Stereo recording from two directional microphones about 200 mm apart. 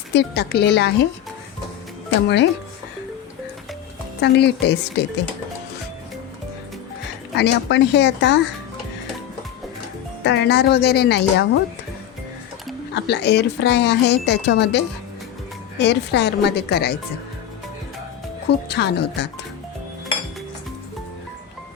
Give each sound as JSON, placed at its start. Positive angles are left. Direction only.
{"t": 0.1, "sound": "speech", "side_deg": 55}
{"t": 2.2, "sound": "speech", "side_deg": 60}
{"t": 4.2, "sound": "speech", "side_deg": 55}
{"t": 7.3, "sound": "speech", "side_deg": 60}
{"t": 10.2, "sound": "speech", "side_deg": 60}
{"t": 12.9, "sound": "speech", "side_deg": 55}
{"t": 15.8, "sound": "speech", "side_deg": 60}
{"t": 18.4, "sound": "speech", "side_deg": 55}